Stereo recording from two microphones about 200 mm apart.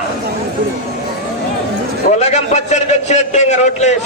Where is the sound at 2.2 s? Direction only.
35° left (ahead or behind).